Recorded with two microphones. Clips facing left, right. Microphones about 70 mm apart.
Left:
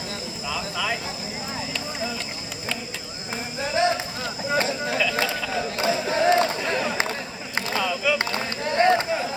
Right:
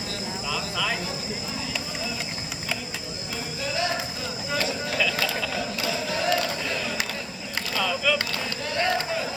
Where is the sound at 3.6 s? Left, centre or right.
Left.